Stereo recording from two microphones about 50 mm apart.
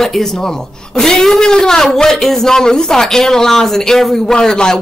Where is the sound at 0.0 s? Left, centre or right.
Centre.